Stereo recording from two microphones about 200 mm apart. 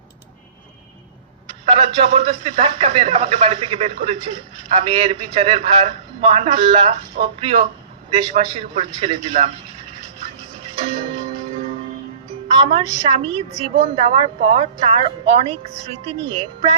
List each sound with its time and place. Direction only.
1.6 s a man's voice: 30° right (ahead or behind)
10.6 s music: 30° right (ahead or behind)
12.5 s a man's voice: 30° right (ahead or behind)